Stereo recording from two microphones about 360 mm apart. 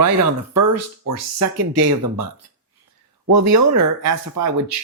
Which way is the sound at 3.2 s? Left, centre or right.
Right.